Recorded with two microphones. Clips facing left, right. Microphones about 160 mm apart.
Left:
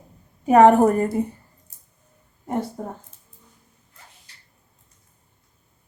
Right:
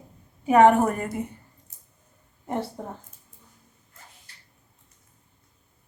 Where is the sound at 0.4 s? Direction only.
35° left (ahead or behind).